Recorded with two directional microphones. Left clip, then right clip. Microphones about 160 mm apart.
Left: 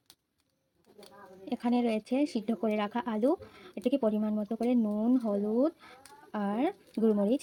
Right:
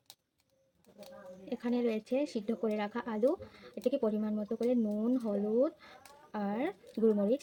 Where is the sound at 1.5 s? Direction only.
35° left (ahead or behind).